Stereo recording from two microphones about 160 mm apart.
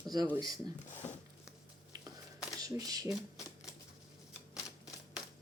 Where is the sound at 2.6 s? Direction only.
25° right (ahead or behind).